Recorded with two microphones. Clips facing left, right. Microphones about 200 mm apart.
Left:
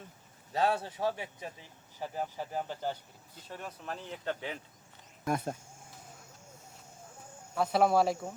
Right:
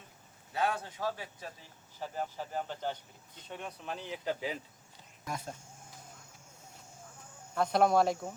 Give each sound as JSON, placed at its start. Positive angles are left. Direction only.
{"t": 0.5, "sound": "a man's voice", "side_deg": 35}
{"t": 5.2, "sound": "speech", "side_deg": 55}
{"t": 7.5, "sound": "speech", "side_deg": 5}